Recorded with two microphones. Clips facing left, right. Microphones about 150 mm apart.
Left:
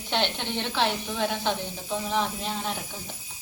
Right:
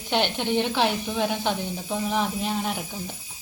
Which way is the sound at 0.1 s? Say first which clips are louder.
Right 4 dB; 10° right (ahead or behind).